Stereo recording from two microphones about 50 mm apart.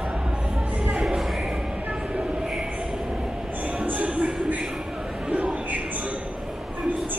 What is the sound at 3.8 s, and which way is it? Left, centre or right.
Music, right.